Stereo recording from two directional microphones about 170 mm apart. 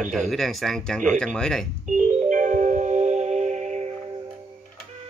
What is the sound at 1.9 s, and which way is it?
Music, 50° right (ahead or behind).